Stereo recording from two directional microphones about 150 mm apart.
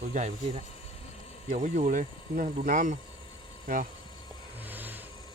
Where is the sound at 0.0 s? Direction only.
55° right (ahead or behind).